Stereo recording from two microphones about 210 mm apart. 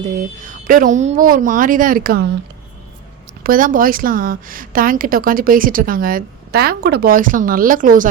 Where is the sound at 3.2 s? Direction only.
45° right (ahead or behind).